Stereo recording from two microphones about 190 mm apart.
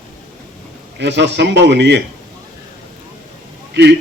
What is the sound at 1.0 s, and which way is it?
Speech, 65° right (ahead or behind).